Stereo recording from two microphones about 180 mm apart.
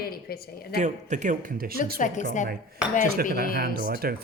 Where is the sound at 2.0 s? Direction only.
45° left (ahead or behind).